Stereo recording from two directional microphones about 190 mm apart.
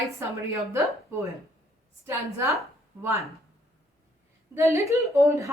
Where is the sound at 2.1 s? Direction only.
15° right (ahead or behind).